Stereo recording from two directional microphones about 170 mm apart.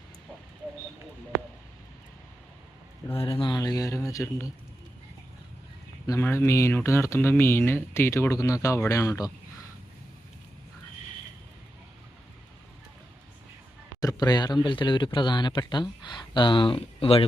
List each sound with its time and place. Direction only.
3.2 s speech: 35° left (ahead or behind); by 4.4 s 20° left (ahead or behind)
6.1 s speech: 15° left (ahead or behind)
14.0 s speech: 20° left (ahead or behind)